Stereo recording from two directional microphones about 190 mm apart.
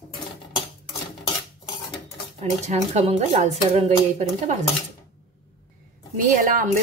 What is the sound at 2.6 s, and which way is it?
Speech, 35° right (ahead or behind).